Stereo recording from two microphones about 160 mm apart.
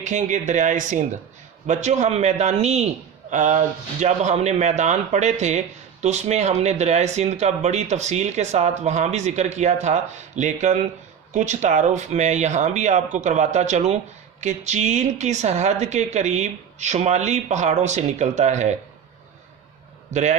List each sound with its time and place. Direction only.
0.0 s speech: 50° right (ahead or behind)
20.1 s a man's voice: 45° right (ahead or behind)